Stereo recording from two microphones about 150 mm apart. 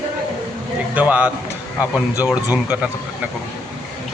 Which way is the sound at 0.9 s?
10° right (ahead or behind).